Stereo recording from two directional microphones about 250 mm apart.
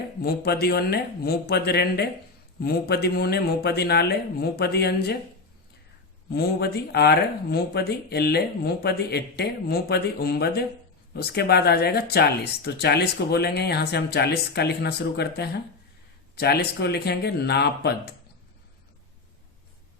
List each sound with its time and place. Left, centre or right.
0.2 s speech: left
6.3 s speech: left